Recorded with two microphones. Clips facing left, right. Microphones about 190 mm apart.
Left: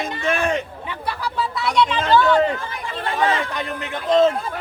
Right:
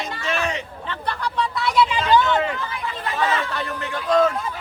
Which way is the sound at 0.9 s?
5° left (ahead or behind).